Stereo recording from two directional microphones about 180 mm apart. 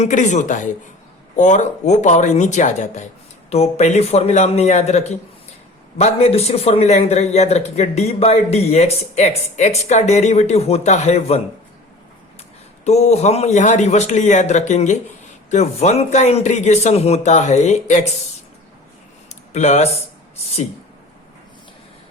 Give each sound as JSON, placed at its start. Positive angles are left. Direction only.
{"t": 0.0, "sound": "a man's voice", "side_deg": 45}
{"t": 12.8, "sound": "a man's voice", "side_deg": 35}
{"t": 19.3, "sound": "a sound", "side_deg": 40}